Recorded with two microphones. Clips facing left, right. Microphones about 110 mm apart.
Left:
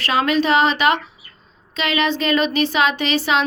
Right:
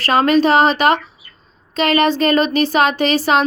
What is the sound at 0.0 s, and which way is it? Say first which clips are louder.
Speech: right 5 dB; 45° right (ahead or behind).